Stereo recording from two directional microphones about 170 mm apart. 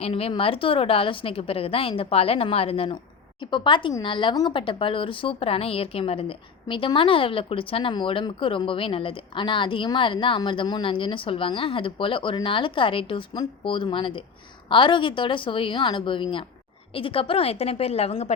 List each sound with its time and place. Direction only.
0.0 s a woman's voice: 35° left (ahead or behind)